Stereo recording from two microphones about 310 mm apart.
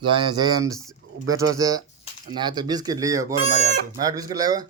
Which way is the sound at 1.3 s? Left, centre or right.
Centre.